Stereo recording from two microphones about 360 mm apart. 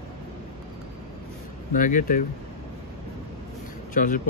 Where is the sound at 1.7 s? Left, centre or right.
Left.